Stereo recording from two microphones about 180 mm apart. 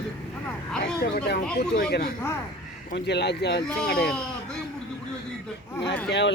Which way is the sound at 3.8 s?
60° left (ahead or behind).